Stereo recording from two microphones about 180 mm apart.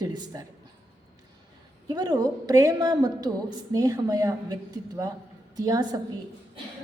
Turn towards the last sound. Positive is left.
turn(degrees=-20)  # may be behind; listen again after turning